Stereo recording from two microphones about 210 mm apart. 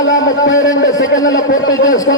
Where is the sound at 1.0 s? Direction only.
15° left (ahead or behind).